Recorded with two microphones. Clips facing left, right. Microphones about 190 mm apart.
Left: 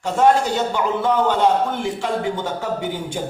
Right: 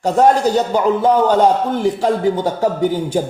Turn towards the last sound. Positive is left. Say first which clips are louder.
# right 8 dB
turn(degrees=-40)  # may be behind; listen again after turning